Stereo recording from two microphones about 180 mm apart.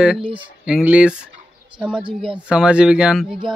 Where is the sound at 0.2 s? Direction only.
30° right (ahead or behind).